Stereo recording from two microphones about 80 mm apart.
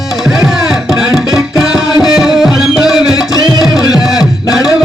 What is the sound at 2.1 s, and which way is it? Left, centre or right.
Music, centre.